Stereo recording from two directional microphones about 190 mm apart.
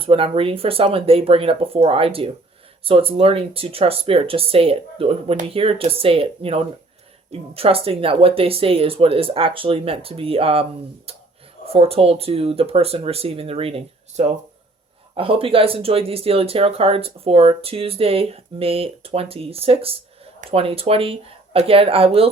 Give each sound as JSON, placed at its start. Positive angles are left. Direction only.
{"t": 0.0, "sound": "speech", "side_deg": -30}